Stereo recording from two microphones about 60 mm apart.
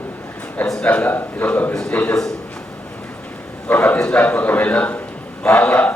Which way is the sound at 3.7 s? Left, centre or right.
Left.